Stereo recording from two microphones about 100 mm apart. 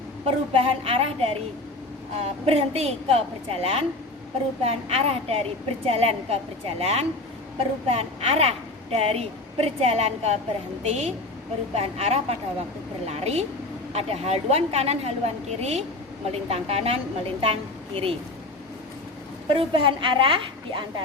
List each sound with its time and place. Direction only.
0.3 s a woman's voice: 75° right (ahead or behind)
19.5 s a woman's voice: 55° right (ahead or behind)